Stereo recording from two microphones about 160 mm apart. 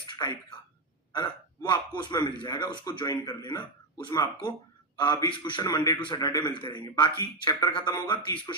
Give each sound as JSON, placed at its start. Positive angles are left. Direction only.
{"t": 0.2, "sound": "speech", "side_deg": 25}